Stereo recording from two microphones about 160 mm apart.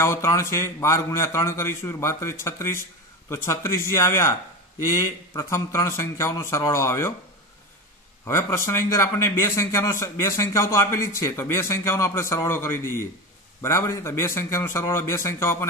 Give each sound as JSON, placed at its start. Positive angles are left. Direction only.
{"t": 0.0, "sound": "speech", "side_deg": 15}
{"t": 8.3, "sound": "speech", "side_deg": 20}